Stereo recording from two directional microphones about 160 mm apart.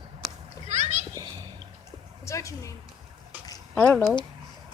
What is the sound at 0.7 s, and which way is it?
Splash, 50° right (ahead or behind).